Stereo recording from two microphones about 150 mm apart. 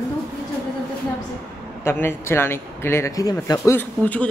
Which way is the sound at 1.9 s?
15° left (ahead or behind).